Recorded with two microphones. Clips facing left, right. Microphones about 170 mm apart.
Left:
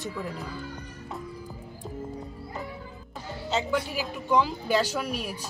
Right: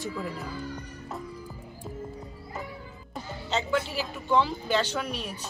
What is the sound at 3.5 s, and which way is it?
A man's voice, 10° left (ahead or behind).